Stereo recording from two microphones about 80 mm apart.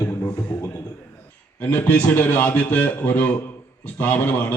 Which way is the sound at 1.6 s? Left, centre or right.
Centre.